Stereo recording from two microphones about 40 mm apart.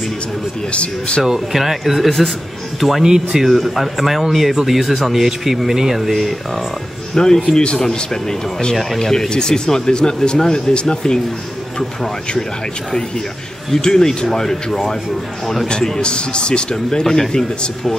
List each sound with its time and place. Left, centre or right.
0.7 s speech: left
1.2 s speech: centre
3.1 s speech: centre
3.4 s speech: centre
7.2 s speech: centre
13.7 s speech: centre
16.0 s speech: left
16.7 s speech: centre